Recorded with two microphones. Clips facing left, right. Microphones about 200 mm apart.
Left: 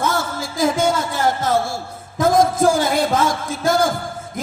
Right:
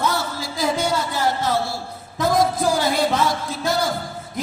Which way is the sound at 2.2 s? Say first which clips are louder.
Left 4 dB; 50° left (ahead or behind).